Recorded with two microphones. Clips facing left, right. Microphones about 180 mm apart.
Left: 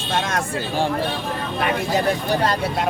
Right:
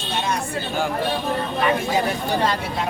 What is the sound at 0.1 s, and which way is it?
Speech, 90° left.